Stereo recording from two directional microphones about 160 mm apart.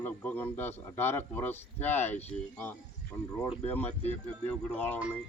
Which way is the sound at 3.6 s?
10° left (ahead or behind).